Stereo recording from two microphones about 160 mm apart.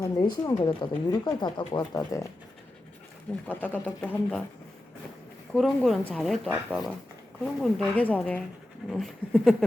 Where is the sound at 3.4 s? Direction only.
10° left (ahead or behind).